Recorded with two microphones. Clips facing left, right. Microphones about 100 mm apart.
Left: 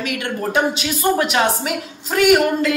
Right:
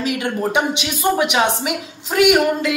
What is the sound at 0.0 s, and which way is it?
Speech, 25° right (ahead or behind).